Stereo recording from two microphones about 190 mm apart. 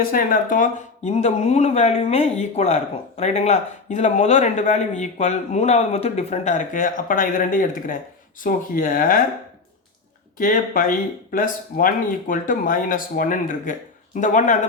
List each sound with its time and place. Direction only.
0.0 s speech: 50° left (ahead or behind)
10.3 s speech: 45° left (ahead or behind)